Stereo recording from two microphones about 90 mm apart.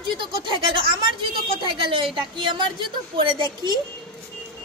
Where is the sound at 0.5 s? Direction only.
70° right (ahead or behind).